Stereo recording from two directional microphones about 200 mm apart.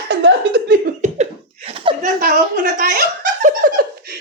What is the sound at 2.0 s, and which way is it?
Snicker, 45° right (ahead or behind).